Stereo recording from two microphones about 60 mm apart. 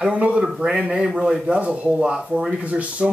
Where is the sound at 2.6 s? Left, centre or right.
Right.